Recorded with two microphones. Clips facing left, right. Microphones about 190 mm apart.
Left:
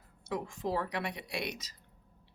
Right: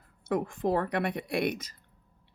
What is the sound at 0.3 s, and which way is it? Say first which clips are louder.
Speech: right 7 dB; 55° right (ahead or behind).